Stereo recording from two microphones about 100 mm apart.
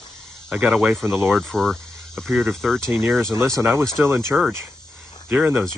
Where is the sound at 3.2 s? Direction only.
30° right (ahead or behind).